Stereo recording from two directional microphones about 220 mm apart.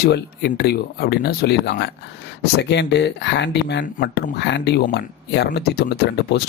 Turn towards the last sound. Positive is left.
turn(degrees=50)  # may be behind; listen again after turning